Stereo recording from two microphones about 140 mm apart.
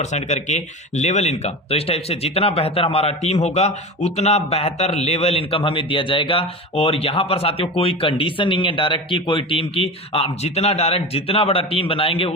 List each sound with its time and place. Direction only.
0.0 s speech: 55° left (ahead or behind)